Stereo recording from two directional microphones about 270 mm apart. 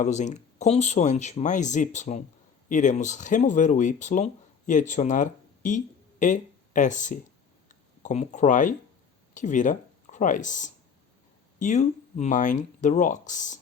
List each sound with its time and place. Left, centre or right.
0.0 s speech: left
7.7 s a sound: left
9.3 s speech: left